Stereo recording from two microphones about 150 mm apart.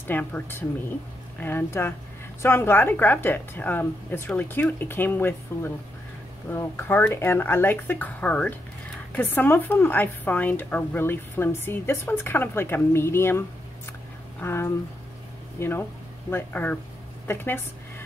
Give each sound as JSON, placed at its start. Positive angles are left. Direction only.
{"t": 0.0, "sound": "a woman's voice", "side_deg": 10}
{"t": 14.4, "sound": "a woman's voice", "side_deg": 15}